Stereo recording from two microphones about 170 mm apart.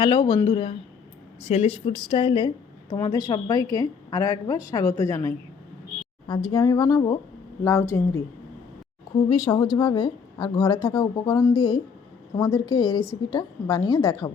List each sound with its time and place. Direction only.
0.0 s a woman's voice: 25° left (ahead or behind)
9.3 s a woman's voice: 25° left (ahead or behind)